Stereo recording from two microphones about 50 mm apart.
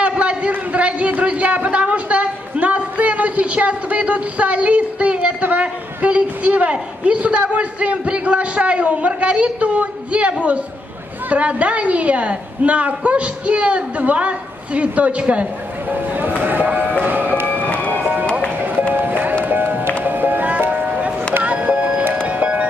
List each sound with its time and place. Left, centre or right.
0.0 s a sound: right
7.5 s a woman's voice: right
15.9 s speech: right
17.0 s music: right
17.7 s music: left
18.9 s music: right